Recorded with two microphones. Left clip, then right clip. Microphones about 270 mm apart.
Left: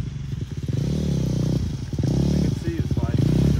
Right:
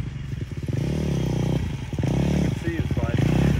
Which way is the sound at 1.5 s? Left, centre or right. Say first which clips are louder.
Even; right.